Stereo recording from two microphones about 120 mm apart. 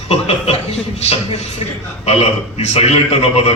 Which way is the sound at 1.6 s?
50° left (ahead or behind).